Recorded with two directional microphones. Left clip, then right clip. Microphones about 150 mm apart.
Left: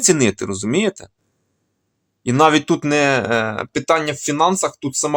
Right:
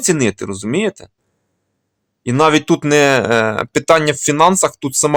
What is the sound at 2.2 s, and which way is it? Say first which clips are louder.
Speech: right 1 dB; 15° right (ahead or behind).